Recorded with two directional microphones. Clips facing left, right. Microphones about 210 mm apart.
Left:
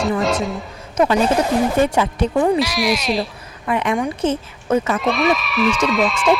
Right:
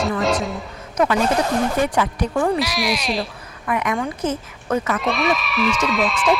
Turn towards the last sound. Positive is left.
turn(degrees=0)  # may be behind; listen again after turning